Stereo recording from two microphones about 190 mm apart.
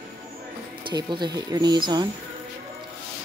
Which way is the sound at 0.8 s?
25° right (ahead or behind).